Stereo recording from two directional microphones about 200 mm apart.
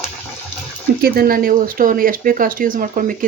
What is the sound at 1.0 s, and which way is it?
Speech, 50° right (ahead or behind).